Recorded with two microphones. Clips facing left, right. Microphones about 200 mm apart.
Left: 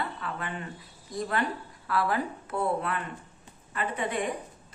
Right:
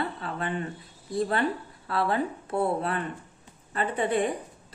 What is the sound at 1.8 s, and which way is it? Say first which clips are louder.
Speech: right 2 dB; 25° right (ahead or behind).